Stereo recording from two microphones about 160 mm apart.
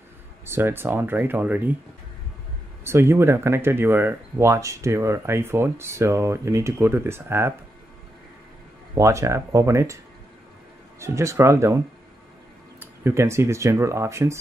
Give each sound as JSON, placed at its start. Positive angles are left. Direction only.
{"t": 0.5, "sound": "speech", "side_deg": -15}
{"t": 2.8, "sound": "speech", "side_deg": -15}
{"t": 8.9, "sound": "speech", "side_deg": -20}
{"t": 11.0, "sound": "speech", "side_deg": -15}
{"t": 13.0, "sound": "speech", "side_deg": -15}